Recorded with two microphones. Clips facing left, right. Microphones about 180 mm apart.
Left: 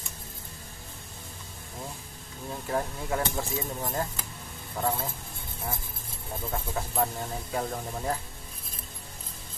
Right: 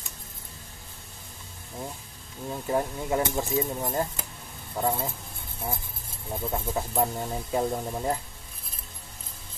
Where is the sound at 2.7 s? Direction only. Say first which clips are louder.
Right 3 dB; 15° right (ahead or behind).